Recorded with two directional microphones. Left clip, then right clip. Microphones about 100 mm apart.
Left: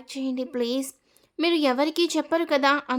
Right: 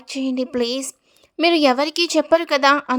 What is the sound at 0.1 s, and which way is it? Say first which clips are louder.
A woman's voice: right 6 dB; 60° right (ahead or behind).